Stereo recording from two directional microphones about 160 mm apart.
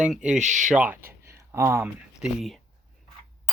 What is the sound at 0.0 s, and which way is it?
Speech, 5° right (ahead or behind).